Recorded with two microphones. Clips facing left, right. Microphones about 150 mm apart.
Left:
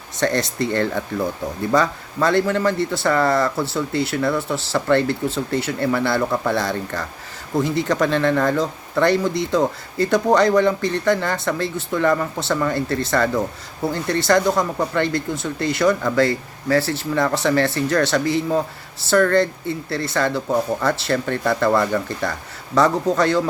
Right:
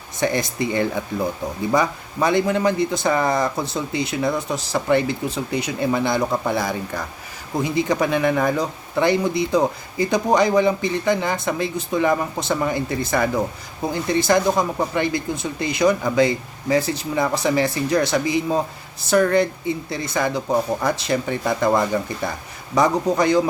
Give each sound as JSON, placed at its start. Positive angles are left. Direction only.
{"t": 0.2, "sound": "speech", "side_deg": -10}